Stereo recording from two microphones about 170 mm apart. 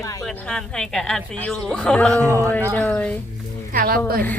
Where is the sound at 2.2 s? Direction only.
15° right (ahead or behind).